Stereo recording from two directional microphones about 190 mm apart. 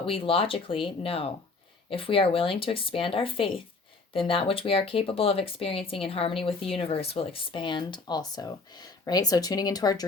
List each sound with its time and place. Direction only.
0.0 s a woman's voice: 30° left (ahead or behind)